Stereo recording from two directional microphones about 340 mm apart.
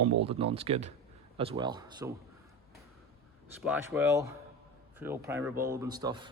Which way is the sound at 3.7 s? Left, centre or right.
Centre.